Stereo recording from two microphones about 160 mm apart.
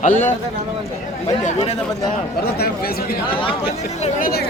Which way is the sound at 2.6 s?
70° left (ahead or behind).